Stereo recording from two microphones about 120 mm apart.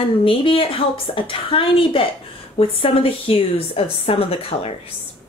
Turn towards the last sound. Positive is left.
turn(degrees=50)  # may be behind; listen again after turning